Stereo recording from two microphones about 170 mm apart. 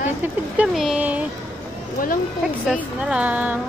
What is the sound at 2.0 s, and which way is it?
Speech, 55° left (ahead or behind).